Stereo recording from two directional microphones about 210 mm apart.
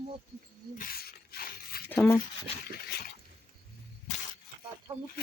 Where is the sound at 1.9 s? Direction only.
10° left (ahead or behind).